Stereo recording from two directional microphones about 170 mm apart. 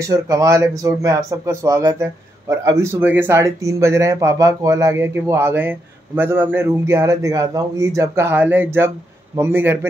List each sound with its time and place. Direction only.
0.1 s speech: 20° right (ahead or behind)